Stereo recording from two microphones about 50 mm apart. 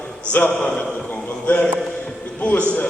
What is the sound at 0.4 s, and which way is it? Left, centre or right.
Speech, left.